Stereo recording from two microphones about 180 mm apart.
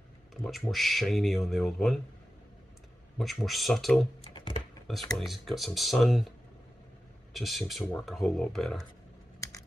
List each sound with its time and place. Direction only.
0.3 s speech: centre (ahead or behind)
3.2 s speech: centre (ahead or behind)
4.2 s computer keyboard: 30° left (ahead or behind)
5.1 s speech: centre (ahead or behind)
7.3 s speech: centre (ahead or behind)